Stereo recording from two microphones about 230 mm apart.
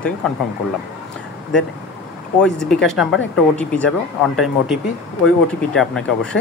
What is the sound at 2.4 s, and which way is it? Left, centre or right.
Speech, centre.